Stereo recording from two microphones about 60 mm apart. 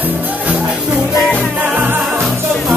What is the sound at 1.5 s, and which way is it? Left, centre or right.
Music, right.